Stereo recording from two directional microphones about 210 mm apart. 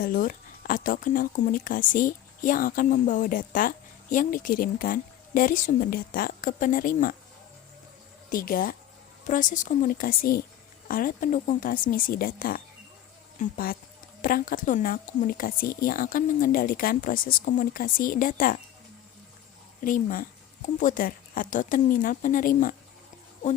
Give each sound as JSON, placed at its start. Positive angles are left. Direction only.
{"t": 0.0, "sound": "speech", "side_deg": 40}
{"t": 8.3, "sound": "speech", "side_deg": 40}
{"t": 19.8, "sound": "speech", "side_deg": 40}